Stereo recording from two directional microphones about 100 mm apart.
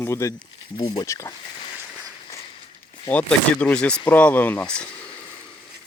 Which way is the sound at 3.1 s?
15° left (ahead or behind).